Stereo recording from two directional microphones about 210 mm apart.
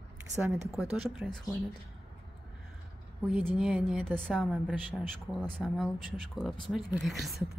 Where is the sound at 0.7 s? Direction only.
Centre (ahead or behind).